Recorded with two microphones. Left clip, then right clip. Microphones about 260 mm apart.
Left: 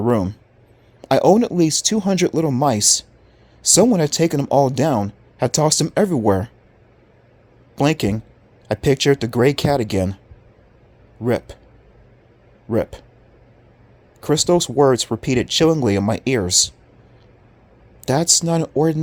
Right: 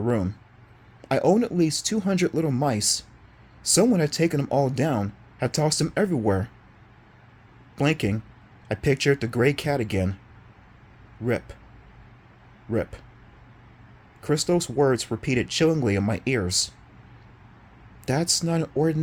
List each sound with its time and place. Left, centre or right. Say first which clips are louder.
0.0 s speech: left 7 dB; left
7.8 s speech: left 6 dB; left
11.2 s speech: left 6 dB; left
12.7 s speech: left 7 dB; left
14.2 s speech: left 7 dB; left
18.0 s speech: left 7 dB; left